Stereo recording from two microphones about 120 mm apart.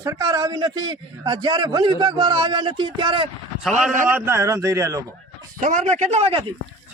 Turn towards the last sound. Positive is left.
turn(degrees=-60)  # may be behind; listen again after turning